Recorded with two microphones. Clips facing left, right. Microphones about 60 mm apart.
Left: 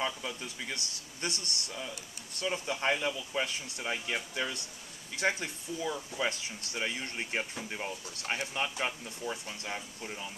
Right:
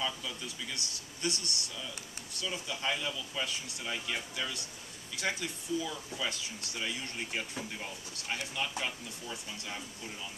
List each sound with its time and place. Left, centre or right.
0.0 s speech: left